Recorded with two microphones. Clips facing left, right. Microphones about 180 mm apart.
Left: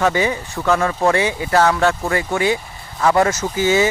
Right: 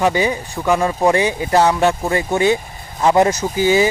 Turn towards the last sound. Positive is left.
turn(degrees=-15)  # may be behind; listen again after turning